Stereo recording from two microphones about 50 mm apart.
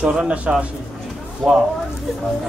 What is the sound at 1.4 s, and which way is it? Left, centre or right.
Speech, centre.